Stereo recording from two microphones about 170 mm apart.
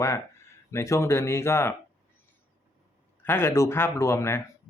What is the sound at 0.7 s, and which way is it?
Speech, 15° left (ahead or behind).